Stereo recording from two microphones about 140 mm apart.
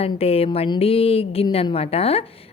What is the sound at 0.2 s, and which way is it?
A woman's voice, 45° left (ahead or behind).